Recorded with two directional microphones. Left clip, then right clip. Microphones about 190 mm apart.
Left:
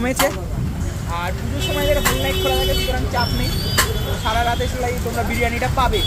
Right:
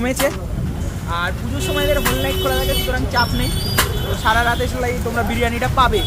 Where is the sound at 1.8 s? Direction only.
15° right (ahead or behind).